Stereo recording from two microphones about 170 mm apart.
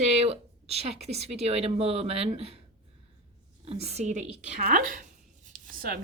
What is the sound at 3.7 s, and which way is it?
Speech, 40° right (ahead or behind).